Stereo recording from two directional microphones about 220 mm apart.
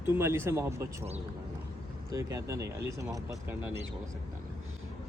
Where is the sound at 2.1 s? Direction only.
15° right (ahead or behind).